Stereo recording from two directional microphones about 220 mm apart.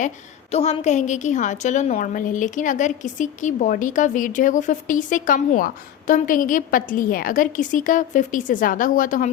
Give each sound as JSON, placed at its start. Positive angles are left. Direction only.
{"t": 0.5, "sound": "a woman's voice", "side_deg": 30}